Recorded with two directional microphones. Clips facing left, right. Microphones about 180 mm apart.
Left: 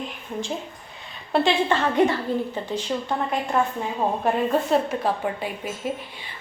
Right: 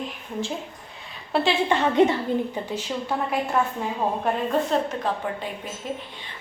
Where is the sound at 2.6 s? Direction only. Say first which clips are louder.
Left 2 dB; 10° right (ahead or behind).